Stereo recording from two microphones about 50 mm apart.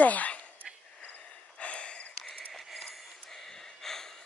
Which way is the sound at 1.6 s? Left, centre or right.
Left.